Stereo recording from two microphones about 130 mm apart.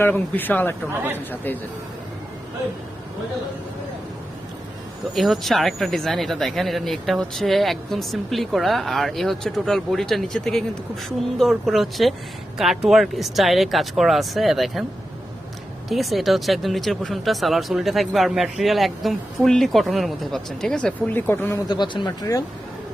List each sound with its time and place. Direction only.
0.0 s speech: 15° left (ahead or behind)
5.1 s speech: centre (ahead or behind)
15.9 s speech: centre (ahead or behind); by 21.6 s 15° left (ahead or behind)
21.7 s speech: 35° left (ahead or behind)